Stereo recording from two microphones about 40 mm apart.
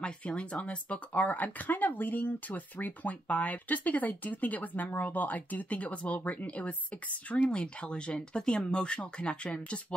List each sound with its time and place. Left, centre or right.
0.0 s speech: left
7.4 s speech: left